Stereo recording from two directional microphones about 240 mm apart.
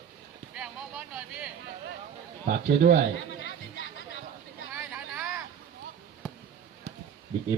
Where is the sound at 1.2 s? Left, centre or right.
Centre.